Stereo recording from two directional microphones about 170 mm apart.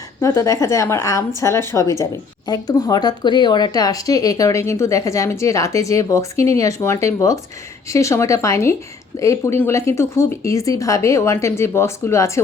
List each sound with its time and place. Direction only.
0.2 s speech: 20° left (ahead or behind)